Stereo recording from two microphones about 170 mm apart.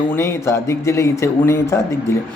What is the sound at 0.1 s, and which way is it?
Speech, 15° left (ahead or behind).